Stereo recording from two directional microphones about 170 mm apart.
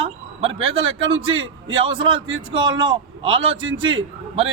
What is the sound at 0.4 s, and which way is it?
A man's voice, 35° right (ahead or behind).